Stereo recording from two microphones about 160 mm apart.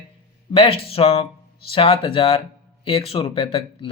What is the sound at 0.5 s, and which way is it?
Speech, 35° left (ahead or behind).